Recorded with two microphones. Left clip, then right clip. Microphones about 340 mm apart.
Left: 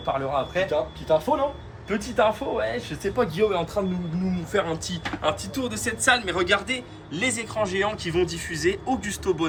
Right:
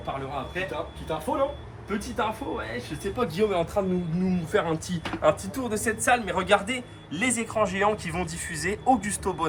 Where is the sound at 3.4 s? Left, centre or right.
Right.